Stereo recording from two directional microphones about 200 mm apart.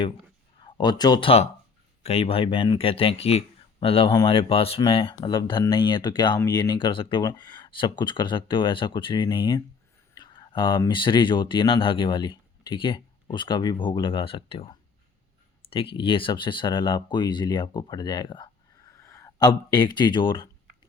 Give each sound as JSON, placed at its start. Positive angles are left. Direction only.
{"t": 0.6, "sound": "speech", "side_deg": 20}